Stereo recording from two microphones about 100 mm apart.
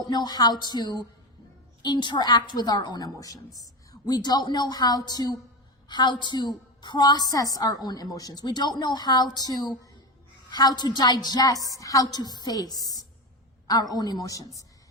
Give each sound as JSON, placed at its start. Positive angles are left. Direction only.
{"t": 0.1, "sound": "a woman's voice", "side_deg": 45}